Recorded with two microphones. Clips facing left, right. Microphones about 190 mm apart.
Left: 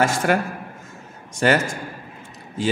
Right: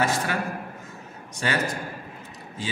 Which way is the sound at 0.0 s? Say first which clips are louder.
Left 6 dB; 45° left (ahead or behind).